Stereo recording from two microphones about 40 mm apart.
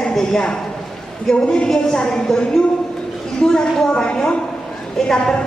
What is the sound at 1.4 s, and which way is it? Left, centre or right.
A woman's voice, centre.